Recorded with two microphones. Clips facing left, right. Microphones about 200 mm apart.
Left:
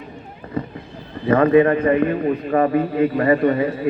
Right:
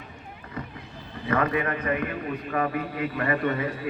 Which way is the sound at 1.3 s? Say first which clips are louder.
Left 12 dB; 30° left (ahead or behind).